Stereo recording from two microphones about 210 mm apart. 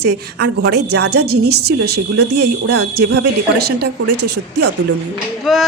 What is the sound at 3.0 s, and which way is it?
Speech, 60° right (ahead or behind).